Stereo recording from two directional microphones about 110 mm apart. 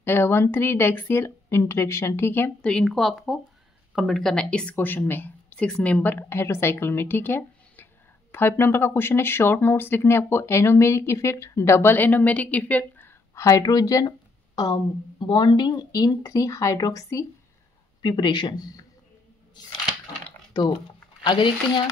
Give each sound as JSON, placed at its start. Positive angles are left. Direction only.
{"t": 0.0, "sound": "a woman's voice", "side_deg": 20}
{"t": 2.7, "sound": "a woman's voice", "side_deg": 5}
{"t": 18.0, "sound": "speech", "side_deg": 45}
{"t": 20.5, "sound": "speech", "side_deg": 40}